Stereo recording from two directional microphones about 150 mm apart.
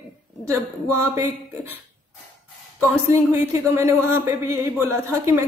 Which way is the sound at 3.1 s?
15° right (ahead or behind).